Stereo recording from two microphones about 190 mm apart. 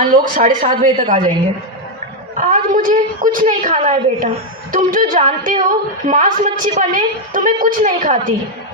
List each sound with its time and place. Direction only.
0.1 s a woman's voice: 45° right (ahead or behind)
2.3 s a woman's voice: 45° right (ahead or behind)